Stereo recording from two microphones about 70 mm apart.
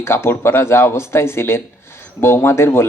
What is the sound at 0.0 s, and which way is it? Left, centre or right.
Speech, left.